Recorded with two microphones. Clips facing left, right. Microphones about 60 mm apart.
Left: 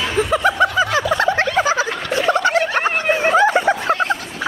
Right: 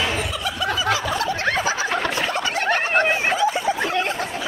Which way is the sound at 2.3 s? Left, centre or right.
Left.